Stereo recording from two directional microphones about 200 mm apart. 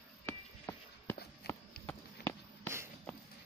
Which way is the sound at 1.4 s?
55° left (ahead or behind).